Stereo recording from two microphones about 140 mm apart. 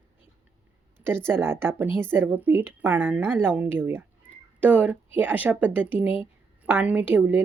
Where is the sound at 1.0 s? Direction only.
15° right (ahead or behind).